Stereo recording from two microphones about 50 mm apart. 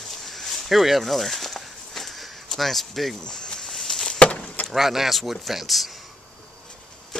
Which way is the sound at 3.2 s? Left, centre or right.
Centre.